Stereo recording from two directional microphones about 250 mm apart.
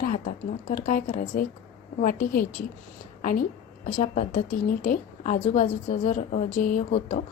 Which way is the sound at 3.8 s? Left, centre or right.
Left.